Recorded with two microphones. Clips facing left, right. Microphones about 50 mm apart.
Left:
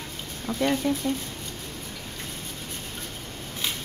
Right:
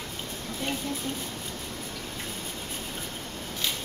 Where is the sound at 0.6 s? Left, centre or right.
Left.